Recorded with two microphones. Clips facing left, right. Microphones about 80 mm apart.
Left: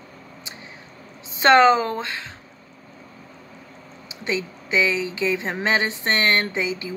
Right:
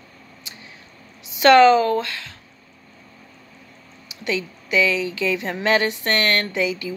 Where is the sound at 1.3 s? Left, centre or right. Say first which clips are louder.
Right 2 dB; left.